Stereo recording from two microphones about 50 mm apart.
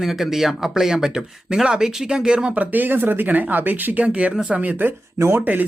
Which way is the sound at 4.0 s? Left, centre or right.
Right.